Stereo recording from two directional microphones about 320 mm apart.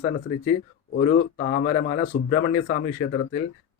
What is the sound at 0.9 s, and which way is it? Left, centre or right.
A man's voice, left.